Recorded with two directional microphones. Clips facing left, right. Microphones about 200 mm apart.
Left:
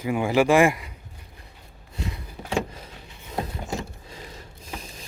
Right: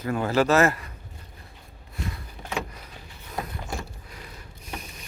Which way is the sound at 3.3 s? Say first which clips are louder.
Left 3 dB; 25° left (ahead or behind).